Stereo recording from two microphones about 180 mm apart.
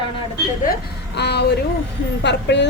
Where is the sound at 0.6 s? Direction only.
60° left (ahead or behind).